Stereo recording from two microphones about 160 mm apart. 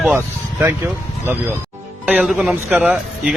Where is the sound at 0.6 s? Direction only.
15° right (ahead or behind).